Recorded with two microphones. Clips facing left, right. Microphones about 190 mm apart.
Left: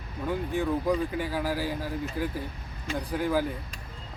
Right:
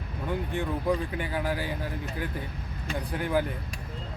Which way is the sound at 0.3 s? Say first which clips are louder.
Left 3 dB; 5° left (ahead or behind).